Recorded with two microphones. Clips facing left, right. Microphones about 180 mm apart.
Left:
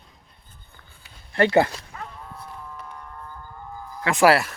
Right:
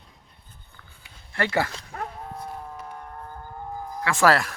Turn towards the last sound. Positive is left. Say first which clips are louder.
# left 3 dB
turn(degrees=5)  # may be behind; listen again after turning